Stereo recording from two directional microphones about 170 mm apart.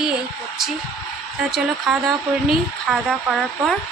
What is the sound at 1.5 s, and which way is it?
Speech, centre (ahead or behind).